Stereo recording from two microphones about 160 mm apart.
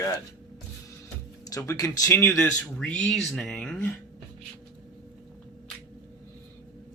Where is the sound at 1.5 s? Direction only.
20° left (ahead or behind).